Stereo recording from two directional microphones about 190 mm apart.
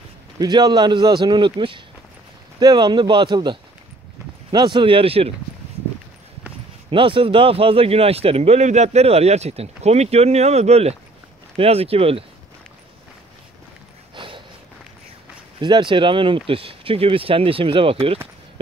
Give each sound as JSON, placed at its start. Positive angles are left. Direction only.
{"t": 0.4, "sound": "speech", "side_deg": -20}
{"t": 6.9, "sound": "speech", "side_deg": -25}
{"t": 14.1, "sound": "snort", "side_deg": -25}
{"t": 15.6, "sound": "speech", "side_deg": -25}